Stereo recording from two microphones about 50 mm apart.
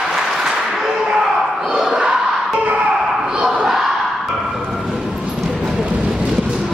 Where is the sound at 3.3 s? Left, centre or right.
Right.